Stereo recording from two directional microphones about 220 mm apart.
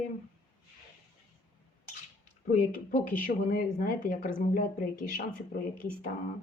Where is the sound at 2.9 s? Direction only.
35° left (ahead or behind).